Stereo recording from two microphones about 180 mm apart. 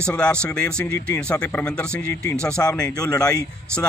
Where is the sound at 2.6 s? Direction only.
20° left (ahead or behind).